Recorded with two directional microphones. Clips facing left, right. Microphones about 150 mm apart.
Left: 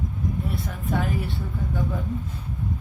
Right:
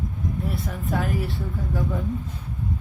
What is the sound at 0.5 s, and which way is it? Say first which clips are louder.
A woman's voice: even; centre (ahead or behind).